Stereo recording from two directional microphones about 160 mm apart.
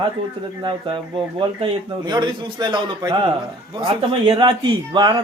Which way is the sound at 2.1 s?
25° right (ahead or behind).